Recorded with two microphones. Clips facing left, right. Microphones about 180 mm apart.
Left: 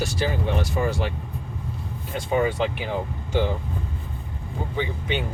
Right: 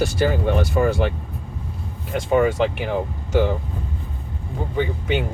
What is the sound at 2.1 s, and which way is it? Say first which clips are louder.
Speech: right 5 dB; 50° right (ahead or behind).